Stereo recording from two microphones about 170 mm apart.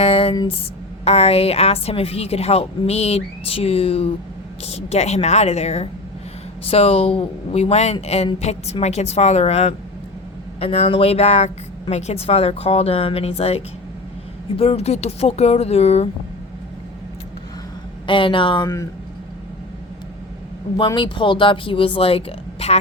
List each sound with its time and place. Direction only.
0.0 s a sound: 35° left (ahead or behind)
1.0 s a woman's voice: 35° left (ahead or behind)
18.0 s speech: 30° left (ahead or behind)
20.7 s speech: 25° left (ahead or behind)